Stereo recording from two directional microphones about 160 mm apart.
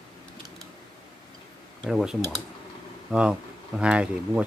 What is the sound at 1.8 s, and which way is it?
Speech, 5° right (ahead or behind).